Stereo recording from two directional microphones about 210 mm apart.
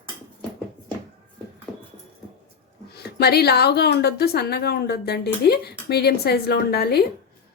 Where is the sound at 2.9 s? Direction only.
50° left (ahead or behind).